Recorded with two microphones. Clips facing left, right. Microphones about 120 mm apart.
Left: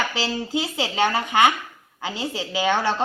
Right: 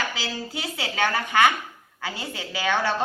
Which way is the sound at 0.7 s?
20° left (ahead or behind).